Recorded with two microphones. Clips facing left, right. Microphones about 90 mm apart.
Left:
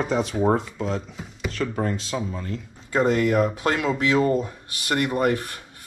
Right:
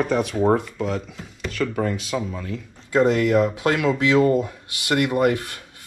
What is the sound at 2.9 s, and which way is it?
Speech, 20° left (ahead or behind).